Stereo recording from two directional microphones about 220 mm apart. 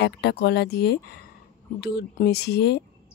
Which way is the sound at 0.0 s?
50° left (ahead or behind).